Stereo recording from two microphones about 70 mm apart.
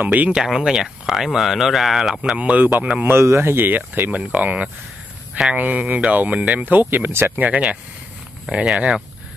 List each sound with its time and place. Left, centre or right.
0.0 s speech: right
0.4 s speech: centre
2.3 s speech: centre
3.1 s speech: right
7.4 s speech: centre